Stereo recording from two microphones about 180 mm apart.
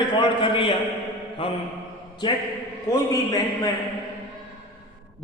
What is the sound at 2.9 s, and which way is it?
Speech, 20° left (ahead or behind).